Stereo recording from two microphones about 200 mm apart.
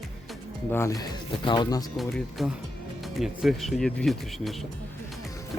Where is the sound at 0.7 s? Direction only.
15° left (ahead or behind).